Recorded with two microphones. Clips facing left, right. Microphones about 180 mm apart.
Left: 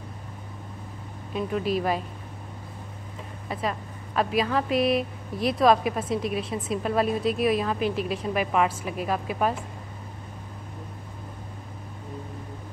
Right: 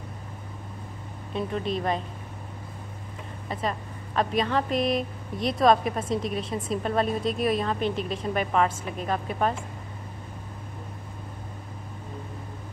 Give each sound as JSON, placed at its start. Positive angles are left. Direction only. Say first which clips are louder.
{"t": 1.3, "sound": "speech", "louder": "left 2 dB", "side_deg": 5}
{"t": 3.4, "sound": "speech", "louder": "even", "side_deg": 5}